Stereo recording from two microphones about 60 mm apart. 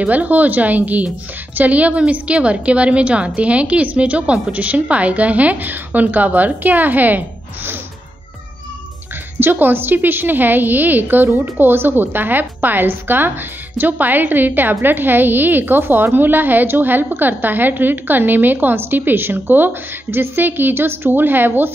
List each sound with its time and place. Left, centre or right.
0.0 s a woman's voice: right
9.4 s a woman's voice: right